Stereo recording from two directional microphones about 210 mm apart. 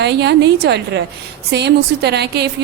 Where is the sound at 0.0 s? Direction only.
55° right (ahead or behind).